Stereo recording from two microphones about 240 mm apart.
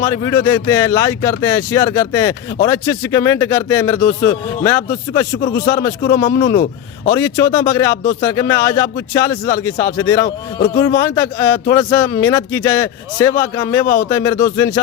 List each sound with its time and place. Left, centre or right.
0.0 s speech: centre
6.4 s speech: left
7.1 s speech: centre